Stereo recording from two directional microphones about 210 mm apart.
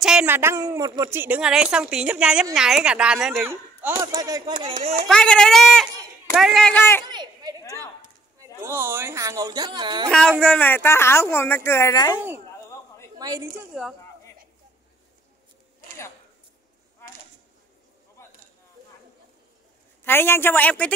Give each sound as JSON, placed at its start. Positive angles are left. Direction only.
{"t": 0.0, "sound": "speech", "side_deg": -5}
{"t": 4.7, "sound": "speech", "side_deg": -40}
{"t": 5.0, "sound": "speech", "side_deg": 5}
{"t": 7.1, "sound": "a sound", "side_deg": -20}
{"t": 8.5, "sound": "speech", "side_deg": -10}
{"t": 10.4, "sound": "speech", "side_deg": 5}
{"t": 13.2, "sound": "speech", "side_deg": -15}
{"t": 15.8, "sound": "a sound", "side_deg": 45}
{"t": 20.1, "sound": "speech", "side_deg": 10}